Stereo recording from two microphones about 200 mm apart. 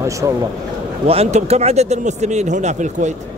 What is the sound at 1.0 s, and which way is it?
Speech, 30° right (ahead or behind).